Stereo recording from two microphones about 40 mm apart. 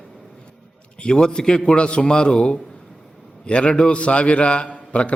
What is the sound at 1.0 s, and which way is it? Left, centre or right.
A man's voice, left.